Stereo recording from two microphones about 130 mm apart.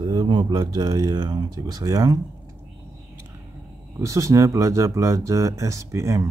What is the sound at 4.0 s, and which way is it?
Speech, 25° right (ahead or behind).